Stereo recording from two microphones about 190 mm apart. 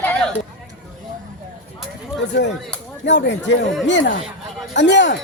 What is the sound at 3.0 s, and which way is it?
Speech, 70° left (ahead or behind).